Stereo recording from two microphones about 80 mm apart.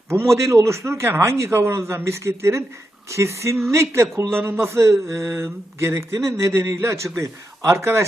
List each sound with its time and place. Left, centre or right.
0.1 s a man's voice: right